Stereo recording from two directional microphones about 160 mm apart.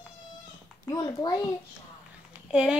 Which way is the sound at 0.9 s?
25° left (ahead or behind).